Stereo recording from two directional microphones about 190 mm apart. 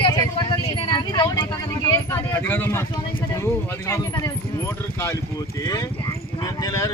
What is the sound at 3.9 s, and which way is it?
Speech, 15° left (ahead or behind).